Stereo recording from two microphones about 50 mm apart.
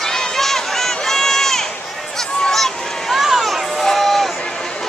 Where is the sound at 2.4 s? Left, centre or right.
Centre.